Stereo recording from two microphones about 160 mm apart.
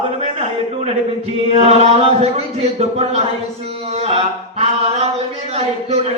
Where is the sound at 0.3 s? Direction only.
40° right (ahead or behind).